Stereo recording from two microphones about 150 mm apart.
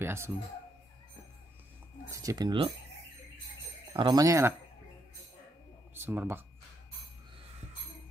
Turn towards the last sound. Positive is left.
turn(degrees=-15)  # may be behind; listen again after turning